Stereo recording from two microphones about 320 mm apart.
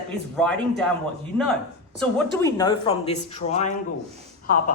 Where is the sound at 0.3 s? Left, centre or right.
Centre.